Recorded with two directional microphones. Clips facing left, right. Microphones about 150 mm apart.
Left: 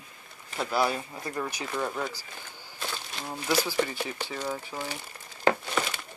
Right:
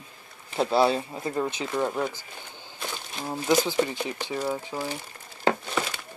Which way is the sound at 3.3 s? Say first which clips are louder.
Right 5 dB; 20° right (ahead or behind).